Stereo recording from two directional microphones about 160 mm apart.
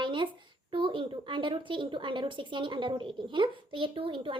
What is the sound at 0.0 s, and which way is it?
Speech, 30° right (ahead or behind).